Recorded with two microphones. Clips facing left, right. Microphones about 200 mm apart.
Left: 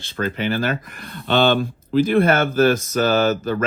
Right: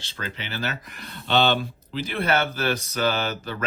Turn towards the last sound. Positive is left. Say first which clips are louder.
# left 10 dB
turn(degrees=45)  # may be behind; listen again after turning